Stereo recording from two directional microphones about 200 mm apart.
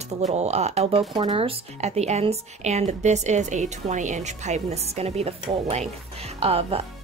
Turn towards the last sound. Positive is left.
turn(degrees=-30)  # may be behind; listen again after turning